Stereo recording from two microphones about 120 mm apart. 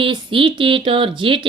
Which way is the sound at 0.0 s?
45° right (ahead or behind).